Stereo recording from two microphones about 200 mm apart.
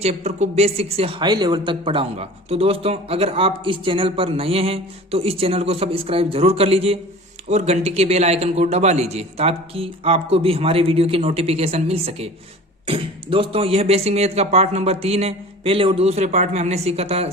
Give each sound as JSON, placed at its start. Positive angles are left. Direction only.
{"t": 0.0, "sound": "a man's voice", "side_deg": -35}